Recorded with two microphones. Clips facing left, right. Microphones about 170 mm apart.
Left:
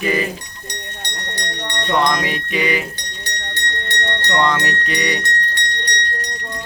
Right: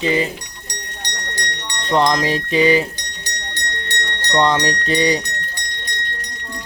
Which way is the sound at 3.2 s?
55° left (ahead or behind).